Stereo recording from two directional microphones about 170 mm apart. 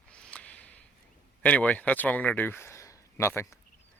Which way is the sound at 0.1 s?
5° left (ahead or behind).